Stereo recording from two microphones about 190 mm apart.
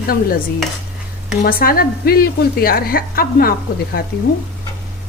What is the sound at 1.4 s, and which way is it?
A woman's voice, 50° left (ahead or behind).